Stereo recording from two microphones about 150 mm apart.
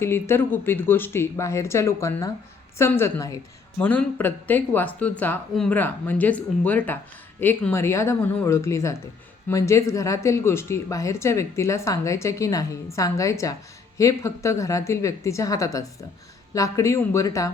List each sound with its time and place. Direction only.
0.0 s speech: 15° left (ahead or behind)